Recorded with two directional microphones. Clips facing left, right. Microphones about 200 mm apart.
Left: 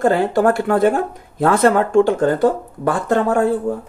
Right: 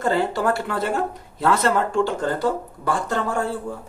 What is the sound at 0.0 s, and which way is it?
Speech, 50° left (ahead or behind).